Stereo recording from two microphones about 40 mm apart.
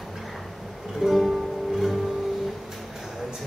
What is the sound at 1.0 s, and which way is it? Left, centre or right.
Music, centre.